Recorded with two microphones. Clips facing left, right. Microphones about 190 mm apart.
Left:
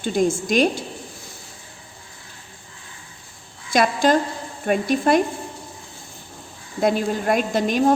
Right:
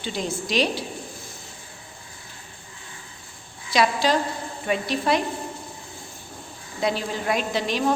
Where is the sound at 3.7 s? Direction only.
50° left (ahead or behind).